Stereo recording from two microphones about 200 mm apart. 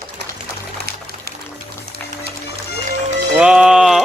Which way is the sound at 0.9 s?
50° right (ahead or behind).